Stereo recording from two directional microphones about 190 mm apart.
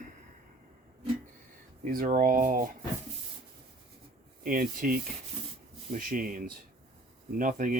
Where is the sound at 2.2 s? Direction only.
45° right (ahead or behind).